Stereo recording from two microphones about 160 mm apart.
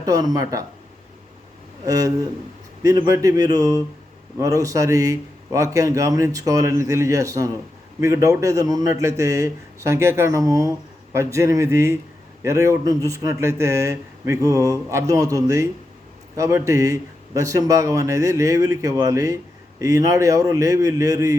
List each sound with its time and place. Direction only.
0.0 s a man's voice: 25° right (ahead or behind)
1.8 s a man's voice: 20° right (ahead or behind)